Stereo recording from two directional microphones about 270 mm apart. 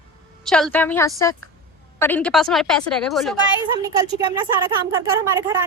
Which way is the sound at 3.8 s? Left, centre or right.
Centre.